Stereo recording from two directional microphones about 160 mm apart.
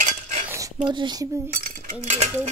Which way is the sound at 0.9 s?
30° right (ahead or behind).